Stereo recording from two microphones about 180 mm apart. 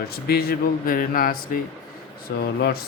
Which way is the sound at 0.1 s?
60° left (ahead or behind).